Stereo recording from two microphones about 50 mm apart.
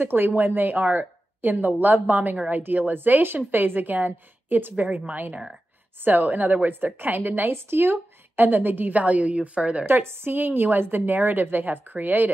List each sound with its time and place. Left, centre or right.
0.0 s a woman's voice: right
4.8 s a woman's voice: right
9.8 s a woman's voice: right